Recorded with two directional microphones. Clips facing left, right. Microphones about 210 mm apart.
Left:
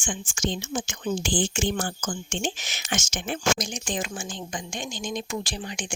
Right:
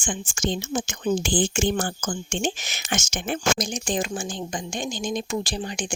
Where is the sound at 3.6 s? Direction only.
40° right (ahead or behind).